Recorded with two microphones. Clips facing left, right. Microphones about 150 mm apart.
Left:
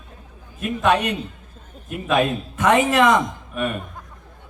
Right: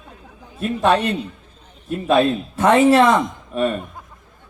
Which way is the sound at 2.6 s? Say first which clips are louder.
Right 4 dB; 35° right (ahead or behind).